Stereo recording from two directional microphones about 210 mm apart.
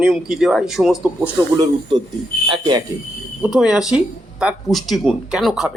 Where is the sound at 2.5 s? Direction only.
20° right (ahead or behind).